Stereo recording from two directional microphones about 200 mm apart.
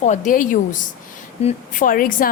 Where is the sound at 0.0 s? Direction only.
35° left (ahead or behind).